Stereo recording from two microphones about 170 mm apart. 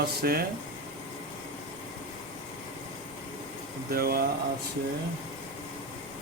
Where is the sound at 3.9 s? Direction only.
65° right (ahead or behind).